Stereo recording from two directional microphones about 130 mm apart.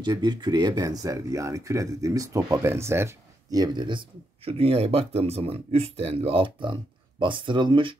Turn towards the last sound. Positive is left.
turn(degrees=-40)  # may be behind; listen again after turning